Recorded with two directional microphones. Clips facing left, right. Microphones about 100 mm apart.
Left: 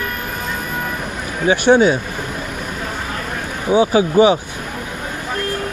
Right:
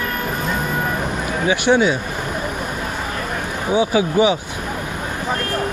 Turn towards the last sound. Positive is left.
turn(degrees=35)  # may be behind; listen again after turning